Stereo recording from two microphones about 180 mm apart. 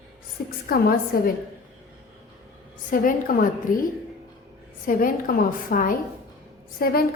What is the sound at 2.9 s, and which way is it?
Speech, 50° left (ahead or behind).